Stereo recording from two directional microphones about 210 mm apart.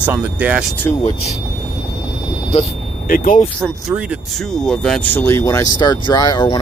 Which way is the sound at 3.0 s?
45° left (ahead or behind).